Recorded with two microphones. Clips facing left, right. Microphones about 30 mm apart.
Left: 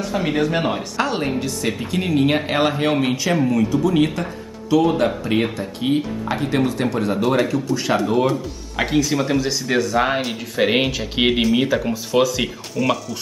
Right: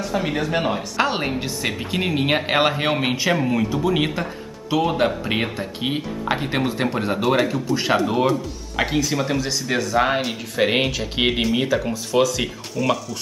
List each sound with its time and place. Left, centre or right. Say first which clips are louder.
0.0 s speech: left 3 dB; centre
0.9 s speech: right 1 dB; centre